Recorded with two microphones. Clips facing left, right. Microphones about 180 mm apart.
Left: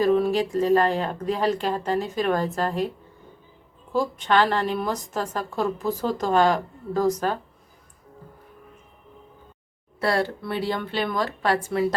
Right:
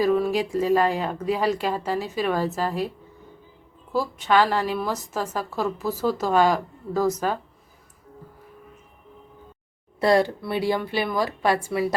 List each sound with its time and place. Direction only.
0.0 s a woman's voice: 10° right (ahead or behind)
3.9 s a woman's voice: 5° right (ahead or behind)
10.0 s a woman's voice: 15° right (ahead or behind)